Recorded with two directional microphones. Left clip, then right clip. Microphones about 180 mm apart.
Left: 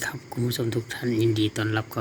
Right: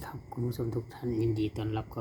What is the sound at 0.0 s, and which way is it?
Speech, 5° left (ahead or behind).